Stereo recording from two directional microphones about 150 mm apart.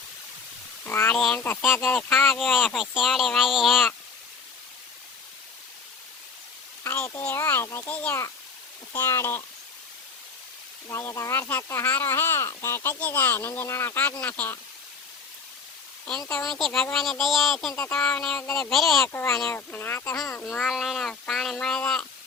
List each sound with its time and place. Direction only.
0.9 s speech: 15° left (ahead or behind)
6.8 s speech: 15° left (ahead or behind)
10.8 s speech: 20° left (ahead or behind)
16.3 s speech: centre (ahead or behind)
17.7 s speech: 10° left (ahead or behind)
19.0 s speech: 15° left (ahead or behind)
20.4 s speech: centre (ahead or behind)